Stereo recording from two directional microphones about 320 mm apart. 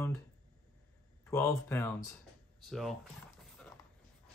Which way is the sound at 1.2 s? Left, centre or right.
Centre.